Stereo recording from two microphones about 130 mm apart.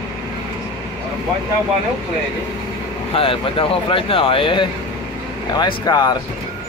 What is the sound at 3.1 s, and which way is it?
Speech, 45° left (ahead or behind).